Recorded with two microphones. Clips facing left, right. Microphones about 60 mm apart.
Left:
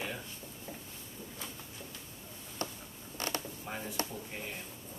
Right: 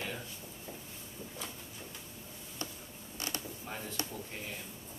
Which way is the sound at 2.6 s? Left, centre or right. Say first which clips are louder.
Left 4 dB; left.